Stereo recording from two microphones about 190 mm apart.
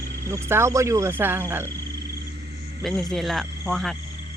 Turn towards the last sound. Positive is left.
turn(degrees=0)  # may be behind; listen again after turning